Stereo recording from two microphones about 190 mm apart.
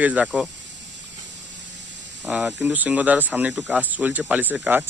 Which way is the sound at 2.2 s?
5° right (ahead or behind).